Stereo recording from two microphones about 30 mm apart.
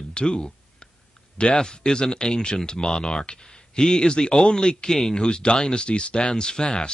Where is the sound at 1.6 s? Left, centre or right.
Left.